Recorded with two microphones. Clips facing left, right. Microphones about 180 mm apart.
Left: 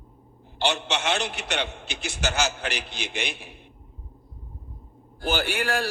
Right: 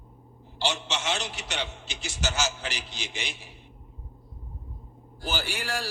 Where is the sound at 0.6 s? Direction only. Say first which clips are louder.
Left 4 dB; 60° left (ahead or behind).